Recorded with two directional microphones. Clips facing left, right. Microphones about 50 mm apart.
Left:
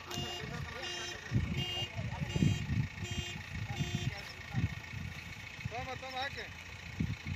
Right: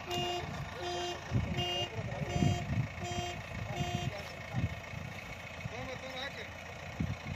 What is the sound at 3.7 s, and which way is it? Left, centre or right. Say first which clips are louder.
Vehicle: right 3 dB; right.